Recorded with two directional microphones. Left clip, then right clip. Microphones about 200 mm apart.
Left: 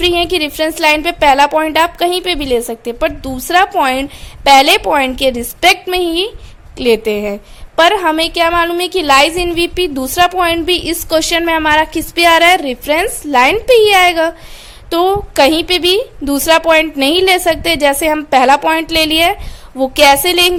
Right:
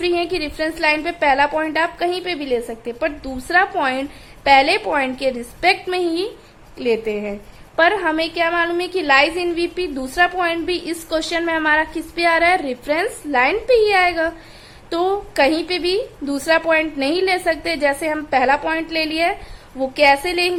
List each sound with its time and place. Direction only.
0.0 s a woman's voice: 35° left (ahead or behind)